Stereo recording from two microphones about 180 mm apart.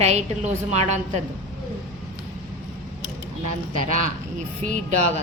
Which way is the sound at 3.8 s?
45° right (ahead or behind).